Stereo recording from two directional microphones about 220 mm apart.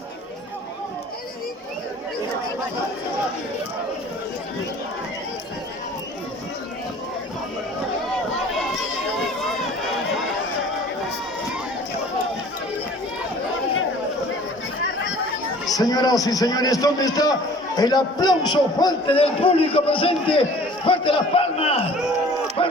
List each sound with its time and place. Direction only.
15.7 s a man's voice: 15° left (ahead or behind)